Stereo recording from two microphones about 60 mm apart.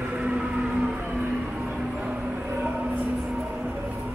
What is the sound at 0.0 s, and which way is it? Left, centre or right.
Vehicle, right.